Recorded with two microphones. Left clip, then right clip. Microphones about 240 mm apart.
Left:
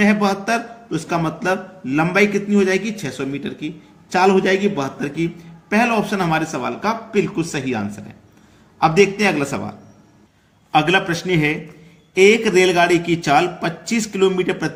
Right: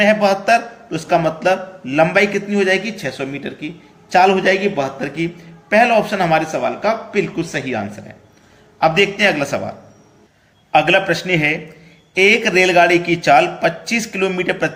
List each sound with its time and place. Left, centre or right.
0.0 s a man's voice: centre
10.7 s a man's voice: centre